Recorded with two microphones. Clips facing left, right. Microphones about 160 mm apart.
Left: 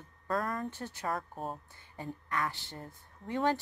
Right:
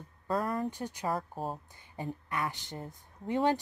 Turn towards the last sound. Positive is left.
turn(degrees=-15)  # may be behind; listen again after turning